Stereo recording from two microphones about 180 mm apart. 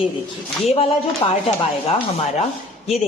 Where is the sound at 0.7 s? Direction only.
35° left (ahead or behind).